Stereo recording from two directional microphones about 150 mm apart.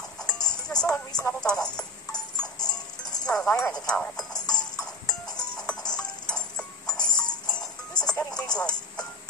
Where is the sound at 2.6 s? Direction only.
25° left (ahead or behind).